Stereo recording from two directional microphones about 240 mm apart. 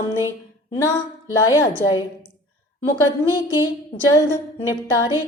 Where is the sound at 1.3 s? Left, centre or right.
Centre.